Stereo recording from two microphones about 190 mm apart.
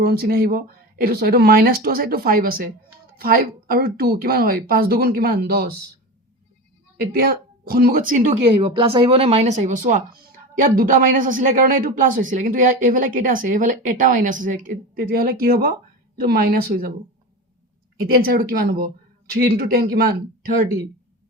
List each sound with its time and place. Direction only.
0.0 s speech: 55° right (ahead or behind)
7.0 s speech: 55° right (ahead or behind)
8.6 s speech: 25° right (ahead or behind); by 16.9 s 50° right (ahead or behind)
18.0 s speech: 50° right (ahead or behind)